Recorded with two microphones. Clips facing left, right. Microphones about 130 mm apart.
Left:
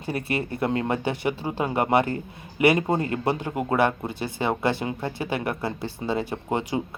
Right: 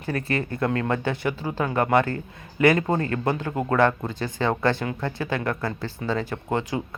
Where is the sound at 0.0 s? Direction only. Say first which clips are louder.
Right 1 dB; 15° left (ahead or behind).